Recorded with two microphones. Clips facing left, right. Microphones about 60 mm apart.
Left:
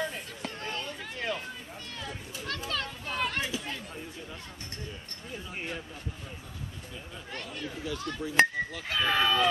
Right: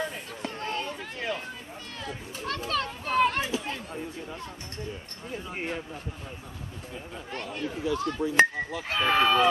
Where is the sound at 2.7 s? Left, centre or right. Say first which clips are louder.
Right 11 dB; centre.